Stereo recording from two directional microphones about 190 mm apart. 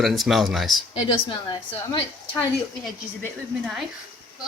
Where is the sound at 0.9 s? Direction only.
25° left (ahead or behind).